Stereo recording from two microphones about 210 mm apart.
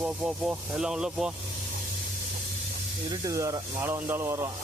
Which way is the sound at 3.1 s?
15° right (ahead or behind).